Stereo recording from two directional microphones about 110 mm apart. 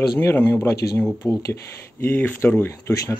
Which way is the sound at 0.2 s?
20° left (ahead or behind).